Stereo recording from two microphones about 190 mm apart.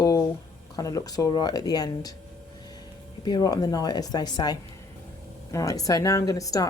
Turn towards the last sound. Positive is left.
turn(degrees=15)  # may be behind; listen again after turning